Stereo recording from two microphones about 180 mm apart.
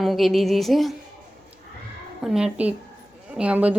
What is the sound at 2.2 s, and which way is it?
Speech, 5° right (ahead or behind).